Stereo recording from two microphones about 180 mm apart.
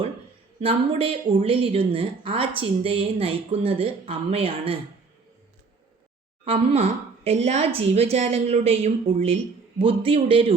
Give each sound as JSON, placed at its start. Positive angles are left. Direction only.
{"t": 0.6, "sound": "a woman's voice", "side_deg": -30}
{"t": 6.4, "sound": "a woman's voice", "side_deg": -30}